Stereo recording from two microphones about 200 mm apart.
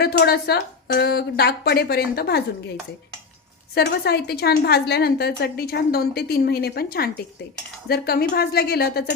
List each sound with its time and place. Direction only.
0.0 s a woman's voice: 50° left (ahead or behind)
3.8 s a woman's voice: 55° left (ahead or behind)